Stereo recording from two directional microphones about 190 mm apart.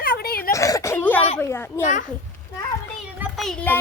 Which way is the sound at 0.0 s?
50° left (ahead or behind).